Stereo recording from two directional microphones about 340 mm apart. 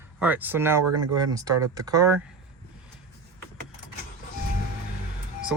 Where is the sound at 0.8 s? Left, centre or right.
Right.